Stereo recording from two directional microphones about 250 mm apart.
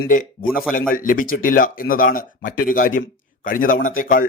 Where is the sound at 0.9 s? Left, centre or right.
Left.